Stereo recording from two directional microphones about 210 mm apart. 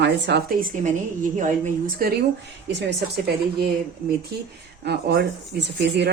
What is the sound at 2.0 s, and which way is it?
Speech, 45° right (ahead or behind).